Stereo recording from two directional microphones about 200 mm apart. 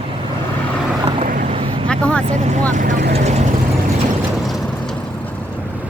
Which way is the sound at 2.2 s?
35° right (ahead or behind).